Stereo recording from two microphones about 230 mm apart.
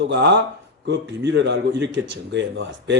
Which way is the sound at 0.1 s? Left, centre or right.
Right.